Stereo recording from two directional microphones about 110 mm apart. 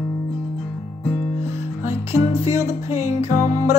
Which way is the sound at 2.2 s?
75° left (ahead or behind).